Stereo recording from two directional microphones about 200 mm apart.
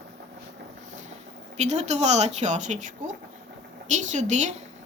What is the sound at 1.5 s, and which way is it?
Speech, 35° right (ahead or behind).